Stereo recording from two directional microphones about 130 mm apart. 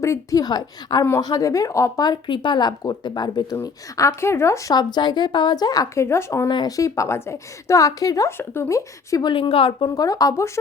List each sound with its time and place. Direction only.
0.0 s speech: 25° left (ahead or behind)
4.7 s speech: 35° left (ahead or behind)
6.5 s speech: 30° left (ahead or behind)
9.3 s a woman's voice: 45° left (ahead or behind)
9.9 s speech: 25° left (ahead or behind)